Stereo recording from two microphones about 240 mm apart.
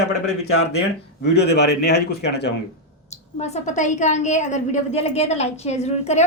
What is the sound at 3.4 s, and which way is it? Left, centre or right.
A woman's voice, left.